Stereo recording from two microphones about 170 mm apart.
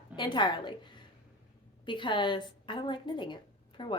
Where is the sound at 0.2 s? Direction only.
25° left (ahead or behind).